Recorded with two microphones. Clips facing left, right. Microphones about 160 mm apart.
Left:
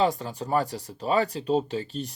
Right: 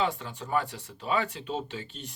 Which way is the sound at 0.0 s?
40° left (ahead or behind).